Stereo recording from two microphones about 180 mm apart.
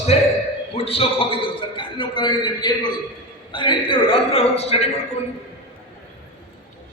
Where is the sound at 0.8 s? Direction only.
30° left (ahead or behind).